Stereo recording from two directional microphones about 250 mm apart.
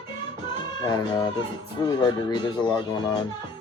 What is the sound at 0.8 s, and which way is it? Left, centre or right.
Speech, centre.